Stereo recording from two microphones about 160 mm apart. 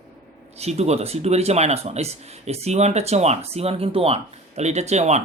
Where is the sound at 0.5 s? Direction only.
40° right (ahead or behind).